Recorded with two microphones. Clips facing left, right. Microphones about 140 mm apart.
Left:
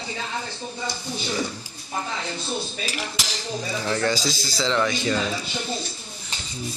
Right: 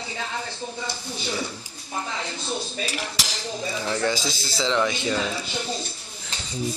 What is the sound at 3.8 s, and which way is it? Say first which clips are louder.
Speech: left 1 dB; 5° right (ahead or behind).